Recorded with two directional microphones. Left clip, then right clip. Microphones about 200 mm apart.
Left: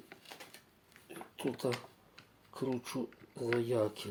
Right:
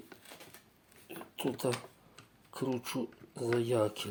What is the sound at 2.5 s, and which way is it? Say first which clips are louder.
Speech: right 2 dB; 15° right (ahead or behind).